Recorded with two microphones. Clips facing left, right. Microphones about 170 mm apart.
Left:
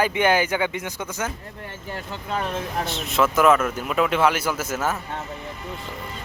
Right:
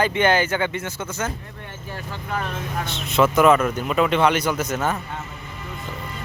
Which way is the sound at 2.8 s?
Centre (ahead or behind).